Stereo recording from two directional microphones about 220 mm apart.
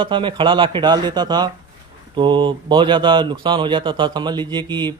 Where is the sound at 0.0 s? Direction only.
20° right (ahead or behind).